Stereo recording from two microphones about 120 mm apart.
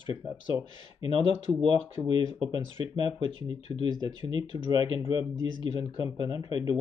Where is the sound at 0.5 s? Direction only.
35° right (ahead or behind).